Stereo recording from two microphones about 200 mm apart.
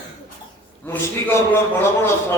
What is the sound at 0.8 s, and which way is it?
A man's voice, 10° left (ahead or behind).